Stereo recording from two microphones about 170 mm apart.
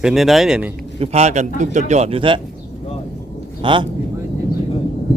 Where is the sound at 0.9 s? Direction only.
40° right (ahead or behind).